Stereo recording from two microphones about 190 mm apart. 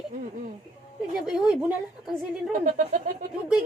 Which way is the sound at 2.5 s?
40° right (ahead or behind).